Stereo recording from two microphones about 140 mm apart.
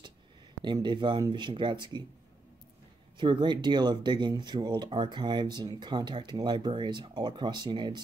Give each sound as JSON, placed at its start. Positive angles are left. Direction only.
{"t": 0.6, "sound": "speech", "side_deg": -35}
{"t": 3.2, "sound": "speech", "side_deg": -35}